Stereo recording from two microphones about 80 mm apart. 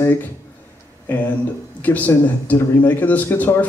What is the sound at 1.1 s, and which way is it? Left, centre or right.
Speech, left.